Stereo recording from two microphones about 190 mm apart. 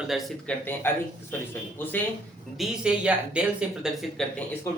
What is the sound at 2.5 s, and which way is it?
Speech, 5° right (ahead or behind).